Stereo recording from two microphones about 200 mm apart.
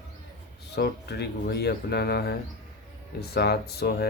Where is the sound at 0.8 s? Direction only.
55° left (ahead or behind).